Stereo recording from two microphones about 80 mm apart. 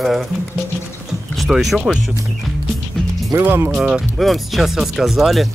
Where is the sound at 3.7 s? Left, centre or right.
Centre.